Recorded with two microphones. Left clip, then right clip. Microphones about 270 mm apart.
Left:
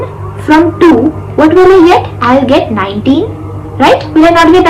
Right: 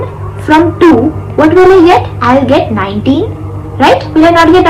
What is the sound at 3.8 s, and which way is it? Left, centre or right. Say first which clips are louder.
Speech: even; centre.